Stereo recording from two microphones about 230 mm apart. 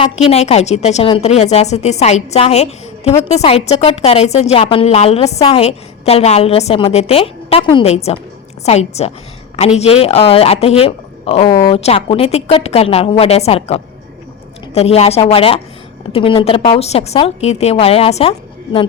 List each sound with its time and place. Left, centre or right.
0.0 s a woman's voice: left